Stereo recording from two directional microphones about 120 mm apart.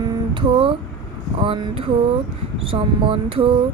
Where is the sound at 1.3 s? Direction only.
50° right (ahead or behind).